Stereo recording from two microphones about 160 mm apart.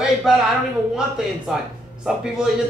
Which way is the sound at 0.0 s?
5° right (ahead or behind).